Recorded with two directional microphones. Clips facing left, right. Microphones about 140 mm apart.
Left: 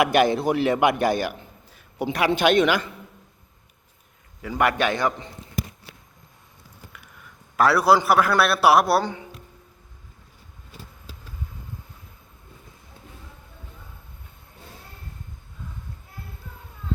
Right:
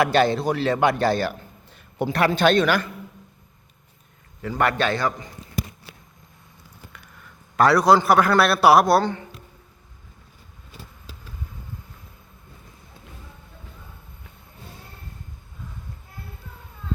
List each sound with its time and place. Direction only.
0.0 s a man's voice: 15° left (ahead or behind)
4.4 s a woman's voice: 10° left (ahead or behind)
7.5 s a man's voice: 5° left (ahead or behind)